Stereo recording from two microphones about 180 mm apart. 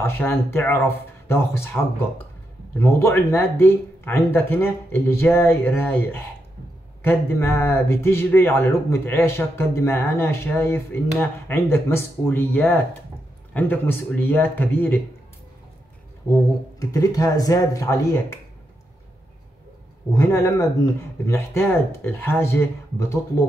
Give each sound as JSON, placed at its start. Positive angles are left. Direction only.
{"t": 0.0, "sound": "speech", "side_deg": 10}
{"t": 16.3, "sound": "speech", "side_deg": 15}
{"t": 20.2, "sound": "speech", "side_deg": 15}